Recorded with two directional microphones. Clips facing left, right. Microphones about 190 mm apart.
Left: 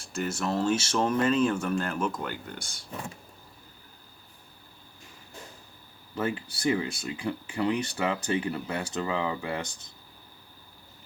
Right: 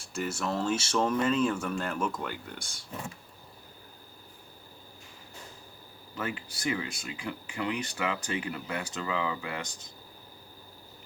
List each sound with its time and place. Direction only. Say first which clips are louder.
0.2 s speech: left 3 dB; centre (ahead or behind)
6.1 s speech: left 5 dB; 30° left (ahead or behind)